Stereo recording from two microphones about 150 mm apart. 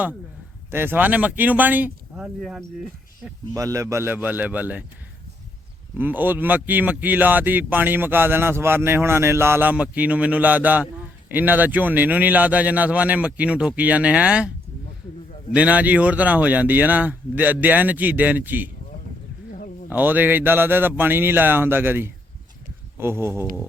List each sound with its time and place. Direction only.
0.7 s speech: 15° right (ahead or behind)
3.5 s speech: 20° right (ahead or behind)
6.0 s speech: 10° right (ahead or behind)
15.5 s speech: 10° right (ahead or behind)
19.9 s speech: 10° right (ahead or behind)